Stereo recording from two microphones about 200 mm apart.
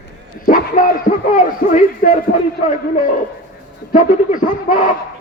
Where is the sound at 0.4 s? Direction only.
45° left (ahead or behind).